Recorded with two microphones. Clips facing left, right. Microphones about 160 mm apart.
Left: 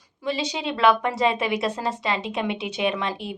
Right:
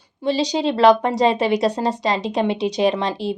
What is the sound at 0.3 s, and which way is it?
Speech, 35° right (ahead or behind).